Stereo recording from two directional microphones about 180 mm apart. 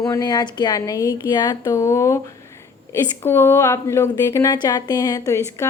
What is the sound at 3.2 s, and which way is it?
Speech, 10° left (ahead or behind).